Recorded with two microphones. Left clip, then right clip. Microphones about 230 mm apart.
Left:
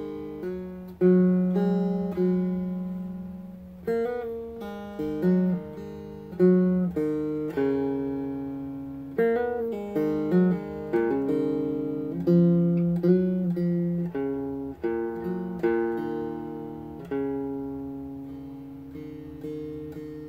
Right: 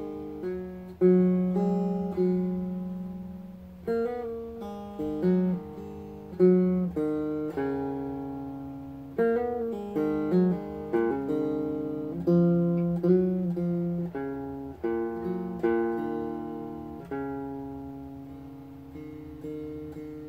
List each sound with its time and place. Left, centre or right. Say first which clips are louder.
0.4 s guitar: even; left
2.1 s music: even; left
3.8 s music: left 2 dB; left
4.9 s guitar: left 1 dB; left
9.1 s music: left 2 dB; left
12.3 s guitar: left 1 dB; left
17.1 s music: left 5 dB; left